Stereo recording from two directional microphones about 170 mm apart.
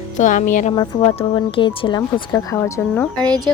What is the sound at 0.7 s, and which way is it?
Speech, 30° left (ahead or behind).